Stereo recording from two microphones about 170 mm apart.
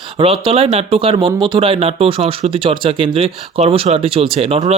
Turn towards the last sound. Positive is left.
turn(degrees=-35)  # may be behind; listen again after turning